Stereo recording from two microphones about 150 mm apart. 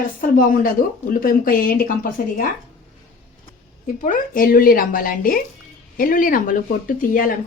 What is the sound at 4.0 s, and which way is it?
Speech, 60° left (ahead or behind).